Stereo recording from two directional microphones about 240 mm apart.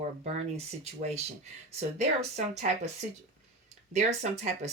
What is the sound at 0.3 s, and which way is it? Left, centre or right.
Speech, right.